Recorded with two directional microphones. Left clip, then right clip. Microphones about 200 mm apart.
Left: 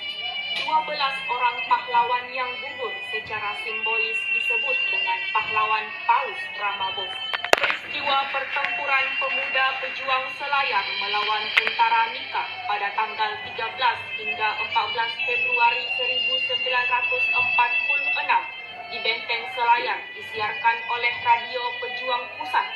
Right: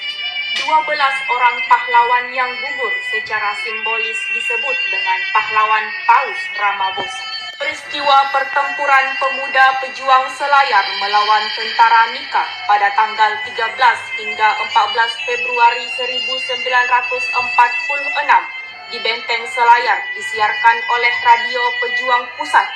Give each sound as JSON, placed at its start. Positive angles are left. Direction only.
{"t": 0.5, "sound": "speech", "side_deg": -30}
{"t": 8.0, "sound": "speech", "side_deg": -45}